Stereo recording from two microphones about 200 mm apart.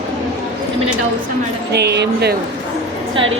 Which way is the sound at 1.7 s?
55° right (ahead or behind).